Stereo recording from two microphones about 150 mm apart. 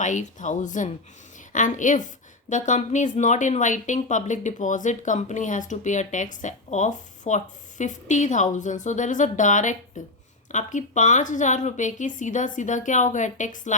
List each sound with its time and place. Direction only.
0.0 s speech: 55° left (ahead or behind)